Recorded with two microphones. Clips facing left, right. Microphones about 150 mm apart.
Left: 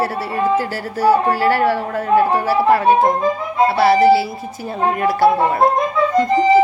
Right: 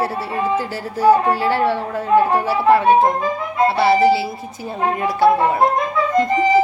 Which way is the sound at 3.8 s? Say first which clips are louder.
Left 3 dB; 20° right (ahead or behind).